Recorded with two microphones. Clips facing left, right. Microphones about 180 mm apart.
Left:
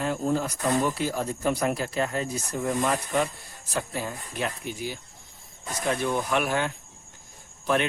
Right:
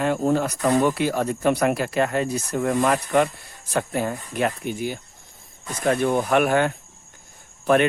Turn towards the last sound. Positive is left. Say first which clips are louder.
# right 7 dB
turn(degrees=-55)  # may be behind; listen again after turning